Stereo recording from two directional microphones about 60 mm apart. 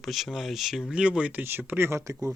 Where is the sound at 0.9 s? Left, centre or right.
Centre.